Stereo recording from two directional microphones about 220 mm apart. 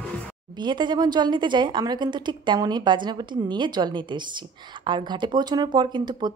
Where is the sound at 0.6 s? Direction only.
20° right (ahead or behind).